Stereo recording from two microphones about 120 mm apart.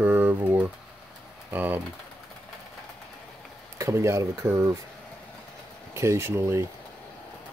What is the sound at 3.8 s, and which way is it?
Speech, 25° right (ahead or behind).